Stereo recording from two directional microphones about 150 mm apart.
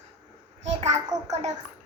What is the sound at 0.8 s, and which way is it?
Speech, 45° right (ahead or behind).